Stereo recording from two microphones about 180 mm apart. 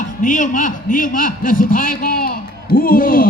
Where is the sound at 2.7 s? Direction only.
50° left (ahead or behind).